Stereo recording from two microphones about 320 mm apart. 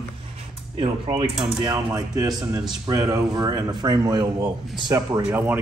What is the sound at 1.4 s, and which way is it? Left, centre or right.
A man's voice, centre.